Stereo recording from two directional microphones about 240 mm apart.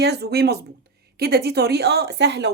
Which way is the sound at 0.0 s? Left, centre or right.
Right.